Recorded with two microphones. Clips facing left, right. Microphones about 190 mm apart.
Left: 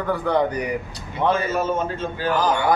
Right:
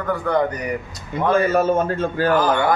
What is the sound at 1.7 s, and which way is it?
Speech, 55° right (ahead or behind).